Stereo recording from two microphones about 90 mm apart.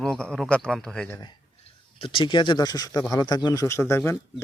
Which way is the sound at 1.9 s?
90° left.